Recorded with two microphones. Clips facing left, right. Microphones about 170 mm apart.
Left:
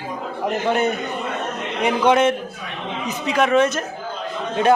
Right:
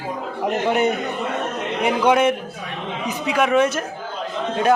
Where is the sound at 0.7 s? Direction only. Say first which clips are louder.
Even; 15° right (ahead or behind).